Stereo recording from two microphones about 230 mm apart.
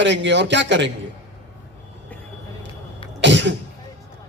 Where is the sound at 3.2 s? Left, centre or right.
Right.